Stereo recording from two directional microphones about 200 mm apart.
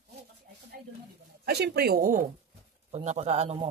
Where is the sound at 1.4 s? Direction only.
55° right (ahead or behind).